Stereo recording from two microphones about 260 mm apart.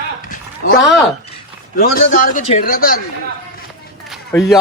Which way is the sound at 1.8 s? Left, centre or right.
Left.